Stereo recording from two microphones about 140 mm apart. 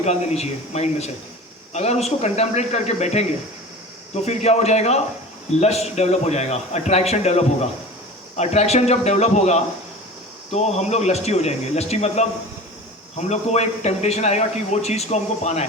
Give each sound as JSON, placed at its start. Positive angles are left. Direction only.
{"t": 0.0, "sound": "speech", "side_deg": 50}